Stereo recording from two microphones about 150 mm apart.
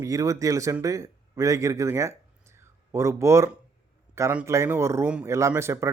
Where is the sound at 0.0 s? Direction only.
20° right (ahead or behind).